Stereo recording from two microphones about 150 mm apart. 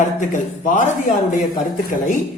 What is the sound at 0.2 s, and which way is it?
Speech, 55° left (ahead or behind).